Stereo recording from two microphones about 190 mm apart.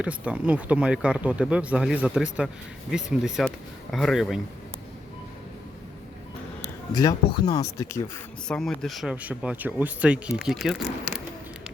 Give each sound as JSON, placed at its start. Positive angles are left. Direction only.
{"t": 0.0, "sound": "speech", "side_deg": -5}
{"t": 6.9, "sound": "speech", "side_deg": 20}
{"t": 8.4, "sound": "speech", "side_deg": 5}